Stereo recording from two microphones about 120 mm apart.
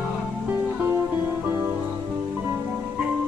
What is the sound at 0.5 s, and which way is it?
Music, 15° right (ahead or behind).